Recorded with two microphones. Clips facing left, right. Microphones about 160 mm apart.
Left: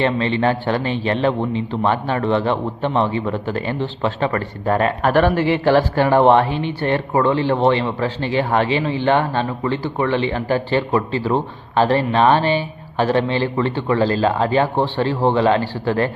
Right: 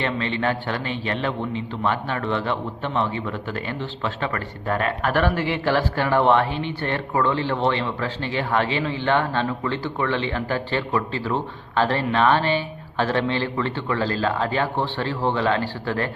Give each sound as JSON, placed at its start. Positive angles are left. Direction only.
{"t": 0.0, "sound": "speech", "side_deg": 30}